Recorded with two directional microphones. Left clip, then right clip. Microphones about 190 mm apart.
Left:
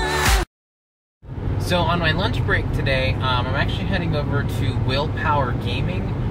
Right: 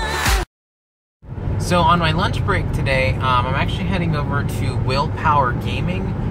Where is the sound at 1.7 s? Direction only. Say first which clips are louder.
Right 5 dB; 15° right (ahead or behind).